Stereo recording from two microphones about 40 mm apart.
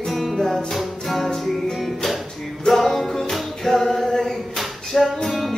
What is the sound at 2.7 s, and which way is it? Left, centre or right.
Music, centre.